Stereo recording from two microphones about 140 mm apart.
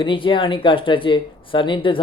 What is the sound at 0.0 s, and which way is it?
Speech, 35° left (ahead or behind).